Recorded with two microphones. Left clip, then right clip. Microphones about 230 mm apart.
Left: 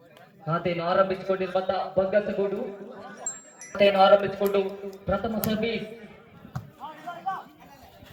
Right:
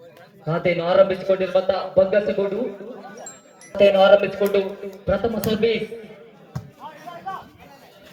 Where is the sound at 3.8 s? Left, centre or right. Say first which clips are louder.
Right 4 dB; right.